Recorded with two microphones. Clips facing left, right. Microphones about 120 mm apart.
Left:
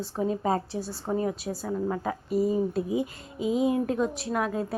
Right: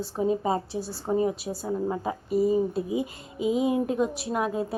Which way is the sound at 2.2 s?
Centre (ahead or behind).